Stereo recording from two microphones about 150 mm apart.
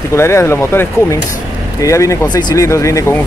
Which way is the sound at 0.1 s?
20° left (ahead or behind).